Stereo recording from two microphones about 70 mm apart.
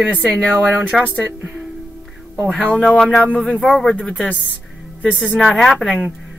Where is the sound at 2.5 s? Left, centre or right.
Centre.